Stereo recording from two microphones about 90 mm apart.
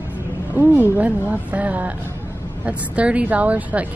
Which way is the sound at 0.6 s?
20° right (ahead or behind).